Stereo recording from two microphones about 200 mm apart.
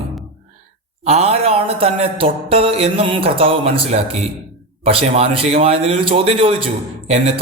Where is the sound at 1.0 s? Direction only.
30° right (ahead or behind).